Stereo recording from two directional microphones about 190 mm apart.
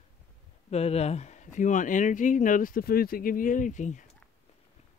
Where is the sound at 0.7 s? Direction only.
35° left (ahead or behind).